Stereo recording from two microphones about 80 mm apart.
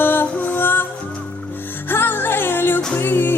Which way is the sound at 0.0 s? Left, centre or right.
Left.